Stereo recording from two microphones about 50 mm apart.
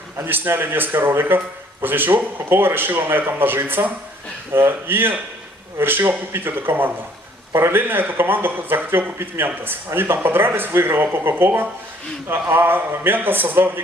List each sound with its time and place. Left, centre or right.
0.2 s speech: right